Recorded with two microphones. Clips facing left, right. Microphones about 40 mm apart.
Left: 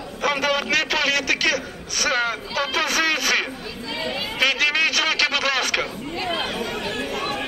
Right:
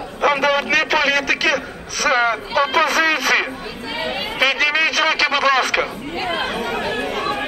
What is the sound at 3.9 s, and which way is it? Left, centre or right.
Chatter, right.